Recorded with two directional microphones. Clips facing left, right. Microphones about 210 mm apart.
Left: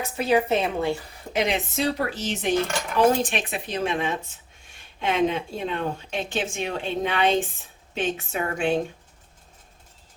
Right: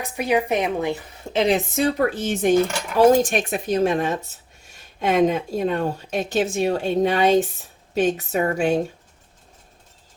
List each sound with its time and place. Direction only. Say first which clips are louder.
0.0 s a woman's voice: even; 15° right (ahead or behind)
1.5 s speech: right 4 dB; 50° right (ahead or behind)